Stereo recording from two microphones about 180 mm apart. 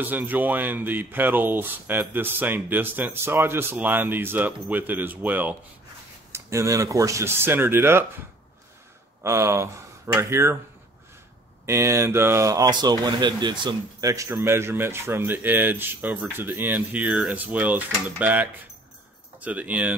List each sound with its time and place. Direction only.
0.0 s speech: 10° right (ahead or behind)
9.2 s speech: 15° right (ahead or behind)
11.6 s speech: 15° right (ahead or behind)